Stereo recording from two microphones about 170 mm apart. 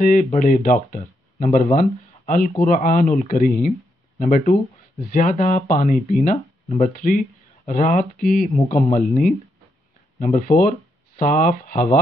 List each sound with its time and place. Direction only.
0.0 s speech: 50° left (ahead or behind)
8.6 s speech: 40° left (ahead or behind)
10.1 s speech: 40° left (ahead or behind)
10.4 s speech: 60° left (ahead or behind)